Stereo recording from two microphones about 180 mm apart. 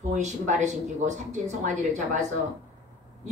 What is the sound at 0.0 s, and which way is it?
A woman's voice, 40° right (ahead or behind).